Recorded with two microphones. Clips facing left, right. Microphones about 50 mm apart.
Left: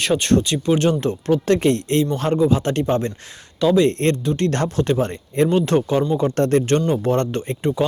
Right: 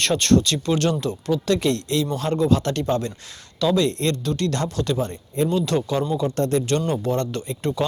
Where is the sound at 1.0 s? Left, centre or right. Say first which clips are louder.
Left 4 dB; left.